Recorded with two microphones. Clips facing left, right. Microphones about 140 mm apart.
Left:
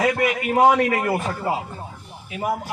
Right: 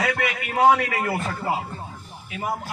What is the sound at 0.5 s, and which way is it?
Speech, 30° left (ahead or behind).